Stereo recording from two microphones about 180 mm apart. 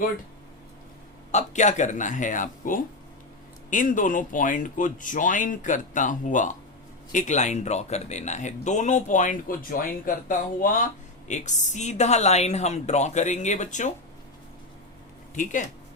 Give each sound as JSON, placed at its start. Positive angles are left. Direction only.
{"t": 1.3, "sound": "a woman's voice", "side_deg": 40}